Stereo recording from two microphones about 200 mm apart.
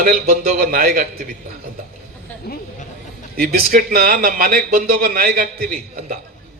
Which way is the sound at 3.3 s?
45° right (ahead or behind).